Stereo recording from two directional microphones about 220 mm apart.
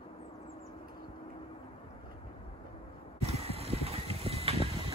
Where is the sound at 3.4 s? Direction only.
25° right (ahead or behind).